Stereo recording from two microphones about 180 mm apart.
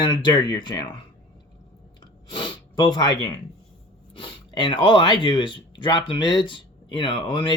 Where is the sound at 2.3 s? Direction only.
25° left (ahead or behind).